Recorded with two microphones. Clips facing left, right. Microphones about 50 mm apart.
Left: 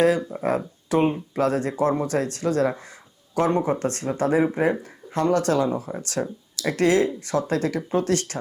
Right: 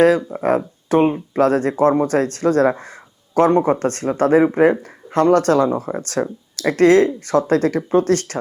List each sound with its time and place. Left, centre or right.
0.4 s speech: right